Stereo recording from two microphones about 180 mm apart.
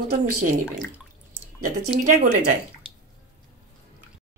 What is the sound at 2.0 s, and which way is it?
Speech, 45° right (ahead or behind).